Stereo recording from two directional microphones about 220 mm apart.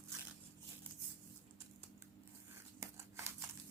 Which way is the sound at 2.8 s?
15° right (ahead or behind).